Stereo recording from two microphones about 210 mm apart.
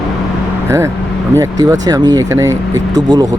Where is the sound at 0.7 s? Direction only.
15° right (ahead or behind).